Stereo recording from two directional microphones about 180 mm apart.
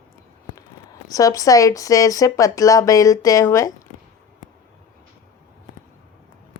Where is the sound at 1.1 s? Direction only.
20° left (ahead or behind).